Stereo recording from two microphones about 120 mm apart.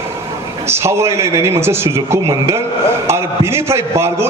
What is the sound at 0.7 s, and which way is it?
A man's voice, 20° right (ahead or behind).